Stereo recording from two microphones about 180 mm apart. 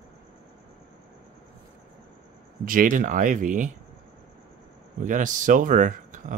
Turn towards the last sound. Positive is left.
turn(degrees=-45)  # may be behind; listen again after turning